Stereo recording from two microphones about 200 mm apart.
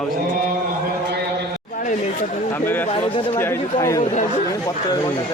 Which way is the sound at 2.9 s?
25° left (ahead or behind).